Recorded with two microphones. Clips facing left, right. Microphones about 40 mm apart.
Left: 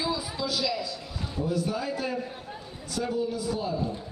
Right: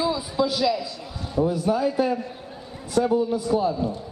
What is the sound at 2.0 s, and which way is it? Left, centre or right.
A woman's voice, centre.